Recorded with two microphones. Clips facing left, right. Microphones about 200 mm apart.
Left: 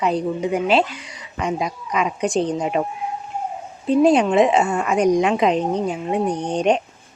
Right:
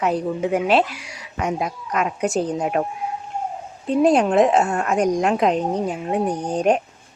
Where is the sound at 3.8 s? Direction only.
Centre (ahead or behind).